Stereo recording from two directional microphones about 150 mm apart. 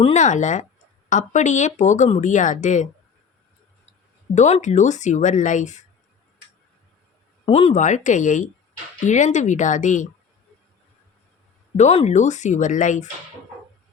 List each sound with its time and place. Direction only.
0.0 s speech: 50° left (ahead or behind)
4.4 s speech: 50° left (ahead or behind)
7.4 s speech: 40° left (ahead or behind); by 10.1 s 55° left (ahead or behind)
11.8 s speech: 50° left (ahead or behind)